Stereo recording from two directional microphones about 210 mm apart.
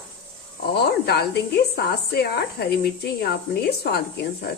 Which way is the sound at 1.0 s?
50° left (ahead or behind).